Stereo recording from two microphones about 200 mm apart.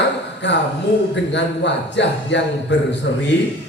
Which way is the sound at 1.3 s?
60° left (ahead or behind).